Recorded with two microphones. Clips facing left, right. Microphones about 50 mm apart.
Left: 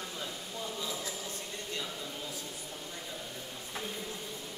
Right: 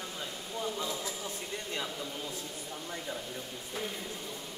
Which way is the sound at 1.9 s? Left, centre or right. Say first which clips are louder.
Right 2 dB; centre.